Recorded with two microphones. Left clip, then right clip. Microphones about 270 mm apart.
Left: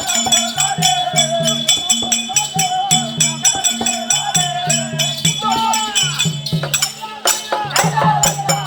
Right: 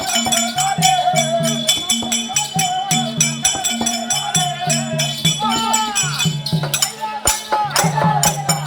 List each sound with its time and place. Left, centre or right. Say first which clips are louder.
0.1 s music: left 3 dB; centre
4.9 s music: left 1 dB; centre
7.7 s music: left 6 dB; centre